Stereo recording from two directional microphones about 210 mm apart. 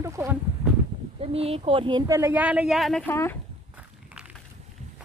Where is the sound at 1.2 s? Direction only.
30° right (ahead or behind); by 3.4 s 10° left (ahead or behind).